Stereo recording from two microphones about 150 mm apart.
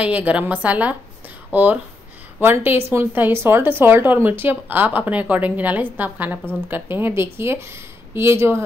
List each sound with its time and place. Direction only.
0.0 s a woman's voice: 10° right (ahead or behind)